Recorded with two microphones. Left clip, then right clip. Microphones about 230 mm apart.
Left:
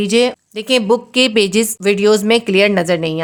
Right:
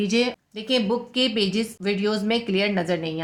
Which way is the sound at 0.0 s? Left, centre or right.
Left.